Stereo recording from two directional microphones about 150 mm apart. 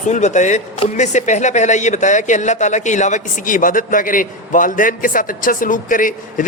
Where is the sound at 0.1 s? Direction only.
50° left (ahead or behind).